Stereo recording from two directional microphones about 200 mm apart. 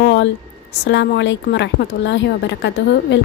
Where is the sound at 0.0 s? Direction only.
60° left (ahead or behind).